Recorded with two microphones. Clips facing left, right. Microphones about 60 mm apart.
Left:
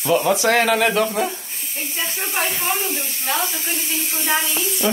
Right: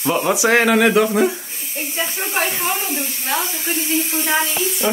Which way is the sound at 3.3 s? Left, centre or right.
Centre.